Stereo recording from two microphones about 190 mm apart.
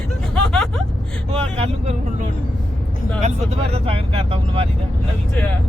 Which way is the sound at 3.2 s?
35° right (ahead or behind).